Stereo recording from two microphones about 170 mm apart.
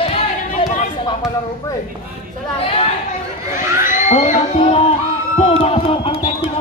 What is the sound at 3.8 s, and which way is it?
Crowd, 45° left (ahead or behind).